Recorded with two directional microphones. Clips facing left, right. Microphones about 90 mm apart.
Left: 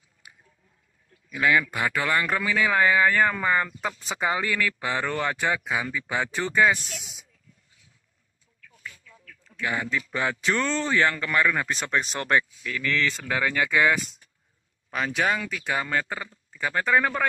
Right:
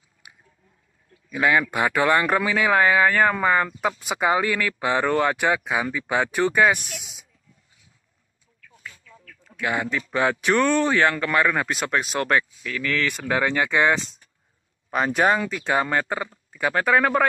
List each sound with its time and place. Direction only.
1.3 s speech: 25° right (ahead or behind)
8.7 s a sound: 30° right (ahead or behind)
10.1 s speech: 20° right (ahead or behind)
11.7 s speech: 5° right (ahead or behind)
13.0 s speech: 20° right (ahead or behind)
14.9 s speech: 40° right (ahead or behind); by 17.3 s 15° right (ahead or behind)